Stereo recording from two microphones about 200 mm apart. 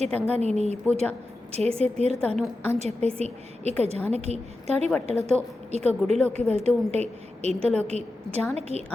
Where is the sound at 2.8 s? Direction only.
30° right (ahead or behind).